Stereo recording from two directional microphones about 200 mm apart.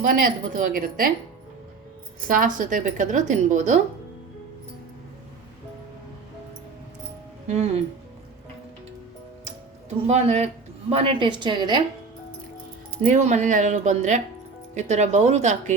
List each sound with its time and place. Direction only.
0.0 s a woman's voice: 40° right (ahead or behind)
2.2 s a woman's voice: 40° right (ahead or behind)
7.4 s speech: 35° right (ahead or behind)
10.1 s a woman's voice: 35° right (ahead or behind)
13.0 s a woman's voice: 40° right (ahead or behind)